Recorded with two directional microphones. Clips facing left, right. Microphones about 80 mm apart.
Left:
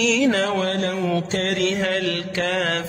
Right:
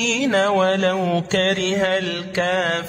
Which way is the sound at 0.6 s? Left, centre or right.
Right.